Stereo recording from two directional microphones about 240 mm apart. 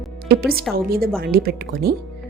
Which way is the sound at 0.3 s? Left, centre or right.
Right.